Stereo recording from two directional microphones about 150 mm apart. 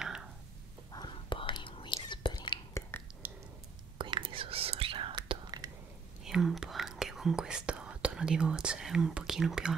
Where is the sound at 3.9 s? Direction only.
30° right (ahead or behind).